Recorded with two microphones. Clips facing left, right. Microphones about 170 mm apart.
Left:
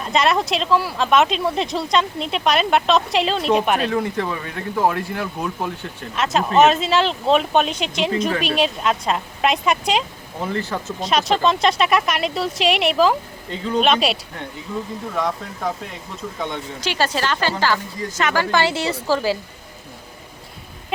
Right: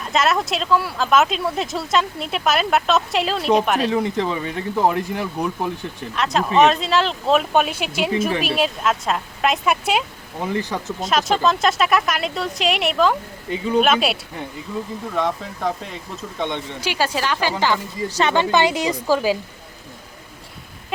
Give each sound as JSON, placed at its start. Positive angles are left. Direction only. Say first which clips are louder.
{"t": 0.1, "sound": "speech", "louder": "left 1 dB", "side_deg": 0}
{"t": 3.9, "sound": "speech", "louder": "right 1 dB", "side_deg": -20}
{"t": 6.1, "sound": "a woman's voice", "louder": "left 1 dB", "side_deg": 0}
{"t": 11.0, "sound": "speech", "louder": "left 1 dB", "side_deg": 0}
{"t": 13.5, "sound": "speech", "louder": "right 1 dB", "side_deg": -10}
{"t": 16.8, "sound": "a woman's voice", "louder": "left 1 dB", "side_deg": -10}
{"t": 18.2, "sound": "a woman's voice", "louder": "right 2 dB", "side_deg": -25}